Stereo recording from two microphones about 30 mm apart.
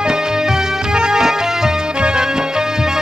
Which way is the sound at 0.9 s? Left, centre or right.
Right.